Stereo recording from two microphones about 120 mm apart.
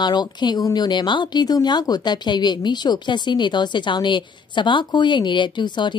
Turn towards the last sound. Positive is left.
turn(degrees=40)  # may be behind; listen again after turning